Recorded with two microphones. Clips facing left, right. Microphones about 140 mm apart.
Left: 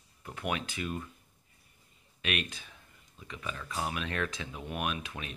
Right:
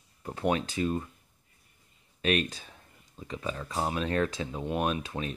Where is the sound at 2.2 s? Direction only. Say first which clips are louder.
Right 8 dB; 35° right (ahead or behind).